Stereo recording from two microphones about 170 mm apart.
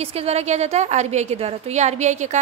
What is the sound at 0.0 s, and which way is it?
A woman's voice, 35° right (ahead or behind).